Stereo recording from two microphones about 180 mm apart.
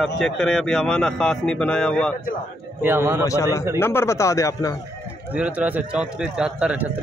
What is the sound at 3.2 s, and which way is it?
A man's voice, 15° left (ahead or behind).